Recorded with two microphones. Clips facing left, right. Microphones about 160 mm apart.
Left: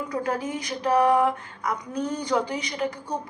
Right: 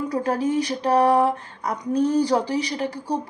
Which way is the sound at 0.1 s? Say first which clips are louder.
Right 5 dB; 35° right (ahead or behind).